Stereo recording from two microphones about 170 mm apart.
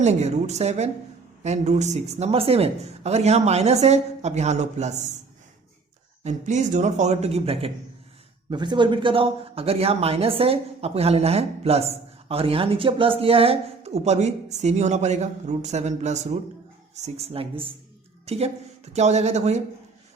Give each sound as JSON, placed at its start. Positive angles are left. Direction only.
{"t": 0.0, "sound": "speech", "side_deg": -40}
{"t": 6.2, "sound": "speech", "side_deg": -45}